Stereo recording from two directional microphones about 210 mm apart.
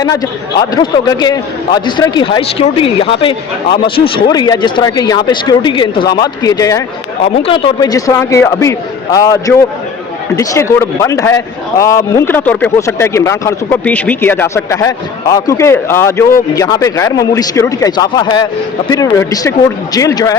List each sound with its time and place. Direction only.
0.0 s a man's voice: 20° left (ahead or behind)